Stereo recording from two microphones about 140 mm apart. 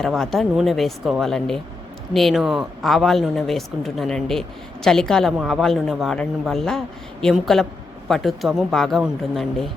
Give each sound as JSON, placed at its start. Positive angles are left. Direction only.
{"t": 0.0, "sound": "speech", "side_deg": 0}